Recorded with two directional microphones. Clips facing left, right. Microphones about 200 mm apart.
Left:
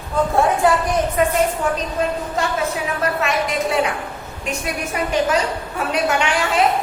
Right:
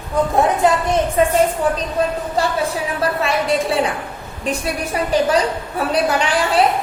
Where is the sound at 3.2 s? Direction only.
30° right (ahead or behind).